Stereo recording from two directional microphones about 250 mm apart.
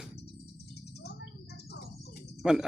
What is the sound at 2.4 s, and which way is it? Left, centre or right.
Speech, centre.